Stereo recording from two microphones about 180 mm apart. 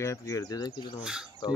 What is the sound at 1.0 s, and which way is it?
Speech, 5° right (ahead or behind).